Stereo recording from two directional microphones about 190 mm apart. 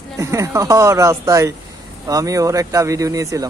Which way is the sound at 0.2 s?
15° right (ahead or behind).